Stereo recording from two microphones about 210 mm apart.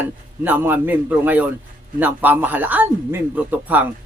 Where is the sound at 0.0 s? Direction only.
10° right (ahead or behind).